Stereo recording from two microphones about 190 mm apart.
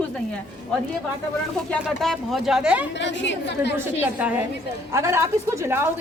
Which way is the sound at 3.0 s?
70° left (ahead or behind).